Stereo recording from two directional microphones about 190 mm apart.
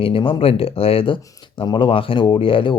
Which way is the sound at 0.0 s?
30° left (ahead or behind).